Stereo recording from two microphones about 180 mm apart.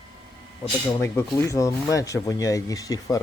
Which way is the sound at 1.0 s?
15° left (ahead or behind).